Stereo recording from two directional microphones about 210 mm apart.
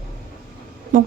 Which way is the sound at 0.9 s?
40° right (ahead or behind).